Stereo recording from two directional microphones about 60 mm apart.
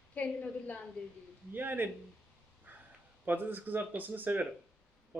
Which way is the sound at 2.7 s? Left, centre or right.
Right.